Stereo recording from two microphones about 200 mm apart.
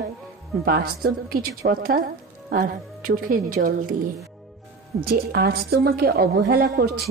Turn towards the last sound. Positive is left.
turn(degrees=-50)  # may be behind; listen again after turning